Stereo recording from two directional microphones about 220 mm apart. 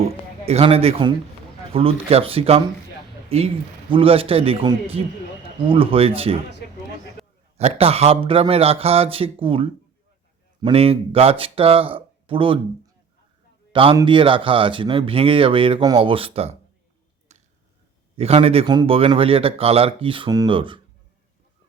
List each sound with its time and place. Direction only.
0.0 s a man's voice: 30° right (ahead or behind)
7.5 s speech: 30° right (ahead or behind)
17.3 s finger snapping: 30° right (ahead or behind)
18.2 s speech: 25° right (ahead or behind)